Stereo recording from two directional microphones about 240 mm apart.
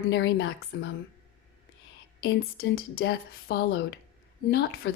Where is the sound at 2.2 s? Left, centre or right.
Left.